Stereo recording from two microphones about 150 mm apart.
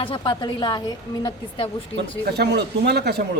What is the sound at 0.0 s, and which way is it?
A woman's voice, 30° left (ahead or behind).